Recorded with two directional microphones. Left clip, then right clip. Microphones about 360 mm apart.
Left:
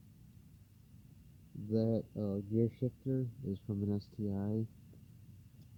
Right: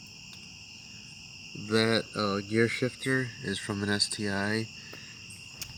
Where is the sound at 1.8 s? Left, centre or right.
Centre.